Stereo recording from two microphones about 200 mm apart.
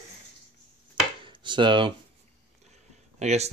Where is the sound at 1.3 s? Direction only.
25° right (ahead or behind).